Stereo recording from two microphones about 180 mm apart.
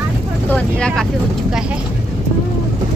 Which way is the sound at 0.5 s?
5° left (ahead or behind).